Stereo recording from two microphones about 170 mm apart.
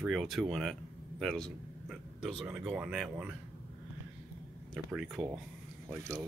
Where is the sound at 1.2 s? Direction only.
Centre (ahead or behind).